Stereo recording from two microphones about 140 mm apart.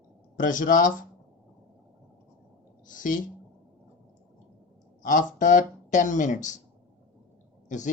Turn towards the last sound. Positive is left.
turn(degrees=65)  # may be behind; listen again after turning